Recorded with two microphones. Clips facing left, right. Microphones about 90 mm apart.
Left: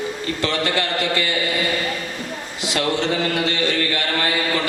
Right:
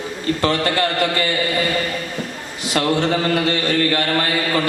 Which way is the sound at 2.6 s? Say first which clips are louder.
Right 3 dB; 45° right (ahead or behind).